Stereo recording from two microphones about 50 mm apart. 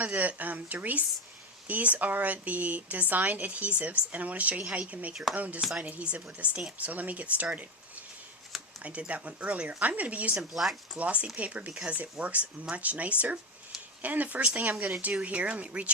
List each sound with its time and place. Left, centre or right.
0.0 s speech: right
8.8 s speech: right
10.5 s speech: centre
10.9 s speech: right